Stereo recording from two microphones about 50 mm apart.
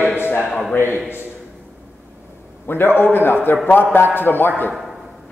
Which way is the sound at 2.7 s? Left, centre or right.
Left.